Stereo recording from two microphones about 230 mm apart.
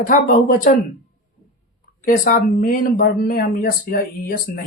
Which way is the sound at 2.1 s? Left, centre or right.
Left.